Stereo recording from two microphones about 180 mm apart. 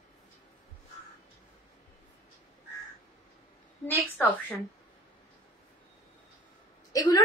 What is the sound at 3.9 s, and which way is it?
Speech, 10° left (ahead or behind).